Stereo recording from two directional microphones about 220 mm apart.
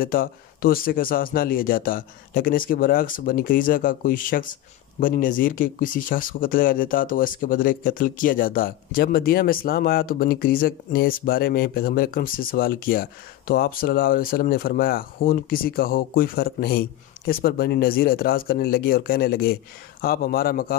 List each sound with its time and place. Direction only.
0.0 s speech: 40° left (ahead or behind)